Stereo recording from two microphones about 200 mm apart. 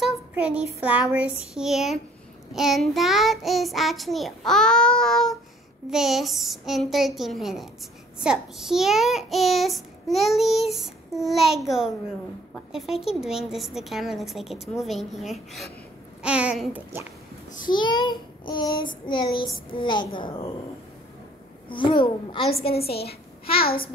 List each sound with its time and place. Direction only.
0.0 s child singing: 5° right (ahead or behind)
0.7 s a child's voice: 5° right (ahead or behind)
17.6 s child singing: 20° left (ahead or behind)
21.6 s child singing: 25° left (ahead or behind)
22.8 s a woman's voice: 50° left (ahead or behind)